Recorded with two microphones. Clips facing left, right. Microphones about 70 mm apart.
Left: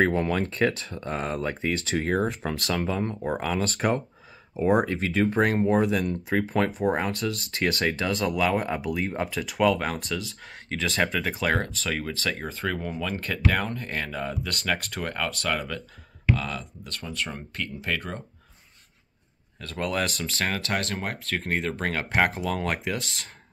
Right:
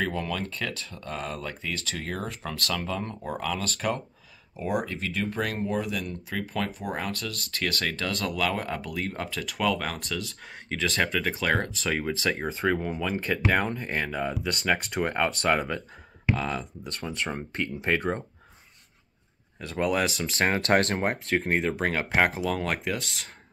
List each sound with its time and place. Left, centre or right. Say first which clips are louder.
0.0 s speech: left 6 dB; left
3.6 s speech: left 4 dB; left
4.6 s speech: left 7 dB; left
6.8 s speech: left 7 dB; left
7.8 s speech: left 4 dB; centre
14.9 s speech: right 4 dB; right
19.7 s speech: right 2 dB; centre
20.4 s speech: right 6 dB; right
21.5 s speech: right 2 dB; centre